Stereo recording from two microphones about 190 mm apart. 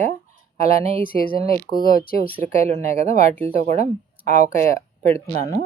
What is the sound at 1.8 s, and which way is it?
Speech, 50° left (ahead or behind).